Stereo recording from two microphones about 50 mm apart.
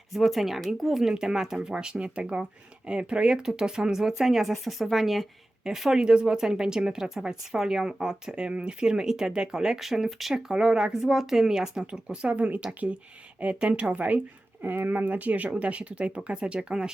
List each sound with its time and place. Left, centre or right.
0.1 s speech: centre
10.5 s speech: centre
12.3 s speech: right
14.6 s speech: right; by 16.9 s centre